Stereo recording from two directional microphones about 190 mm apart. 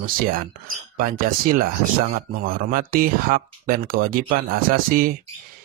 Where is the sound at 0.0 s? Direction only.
50° right (ahead or behind).